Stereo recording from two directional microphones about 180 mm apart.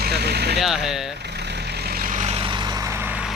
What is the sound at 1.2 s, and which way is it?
Vehicle, 70° right (ahead or behind).